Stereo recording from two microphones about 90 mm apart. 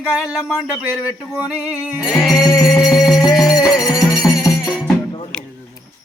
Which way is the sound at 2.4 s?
45° left (ahead or behind).